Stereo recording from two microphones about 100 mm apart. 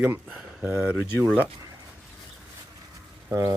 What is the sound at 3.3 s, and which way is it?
Speech, 35° right (ahead or behind).